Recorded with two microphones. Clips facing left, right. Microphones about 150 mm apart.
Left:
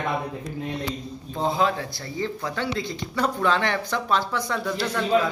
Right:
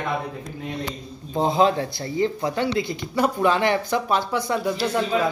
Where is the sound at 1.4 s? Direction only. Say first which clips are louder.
Right 4 dB; 25° right (ahead or behind).